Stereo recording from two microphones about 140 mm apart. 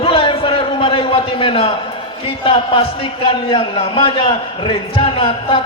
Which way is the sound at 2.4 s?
40° left (ahead or behind).